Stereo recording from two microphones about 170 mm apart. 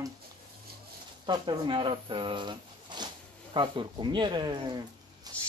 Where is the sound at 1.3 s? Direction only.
30° right (ahead or behind).